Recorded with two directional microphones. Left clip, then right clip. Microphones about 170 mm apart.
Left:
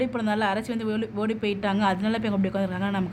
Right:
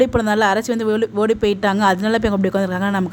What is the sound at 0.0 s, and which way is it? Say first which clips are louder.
A woman's voice: right 10 dB; 50° right (ahead or behind).